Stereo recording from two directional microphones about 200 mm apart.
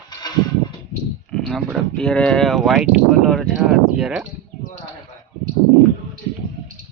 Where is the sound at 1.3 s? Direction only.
Centre (ahead or behind).